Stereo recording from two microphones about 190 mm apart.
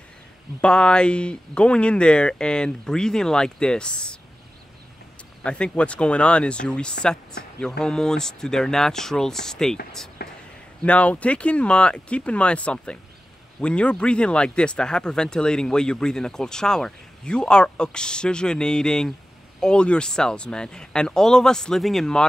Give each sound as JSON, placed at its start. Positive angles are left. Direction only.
{"t": 0.6, "sound": "speech", "side_deg": 5}
{"t": 5.4, "sound": "speech", "side_deg": 5}
{"t": 10.2, "sound": "speech", "side_deg": 55}
{"t": 10.8, "sound": "speech", "side_deg": 5}